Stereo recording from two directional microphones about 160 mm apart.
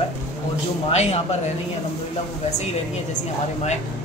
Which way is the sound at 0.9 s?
45° left (ahead or behind).